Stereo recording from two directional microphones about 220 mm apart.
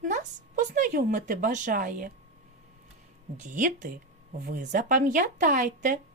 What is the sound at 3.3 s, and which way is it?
A woman's voice, 35° right (ahead or behind).